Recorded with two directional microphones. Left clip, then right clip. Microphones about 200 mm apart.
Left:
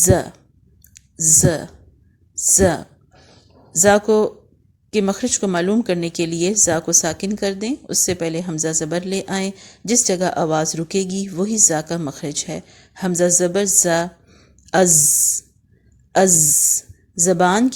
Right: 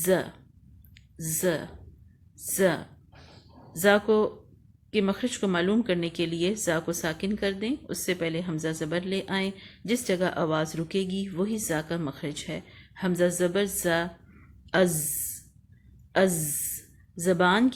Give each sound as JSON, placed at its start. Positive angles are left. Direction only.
{"t": 0.0, "sound": "a woman's voice", "side_deg": 45}
{"t": 16.1, "sound": "a woman's voice", "side_deg": 40}